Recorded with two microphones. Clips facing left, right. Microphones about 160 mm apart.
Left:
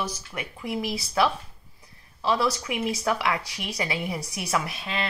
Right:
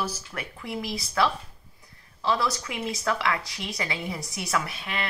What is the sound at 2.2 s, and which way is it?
Speech, 20° left (ahead or behind).